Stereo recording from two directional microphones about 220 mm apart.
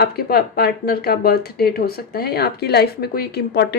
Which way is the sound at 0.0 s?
45° left (ahead or behind).